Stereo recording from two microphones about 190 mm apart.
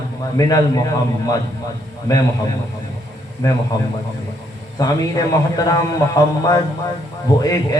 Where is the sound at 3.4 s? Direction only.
20° left (ahead or behind).